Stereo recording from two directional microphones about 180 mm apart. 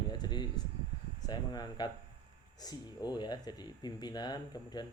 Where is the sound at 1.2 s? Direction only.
20° left (ahead or behind).